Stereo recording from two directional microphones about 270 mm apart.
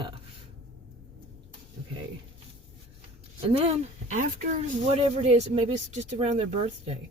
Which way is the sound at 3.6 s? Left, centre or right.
Right.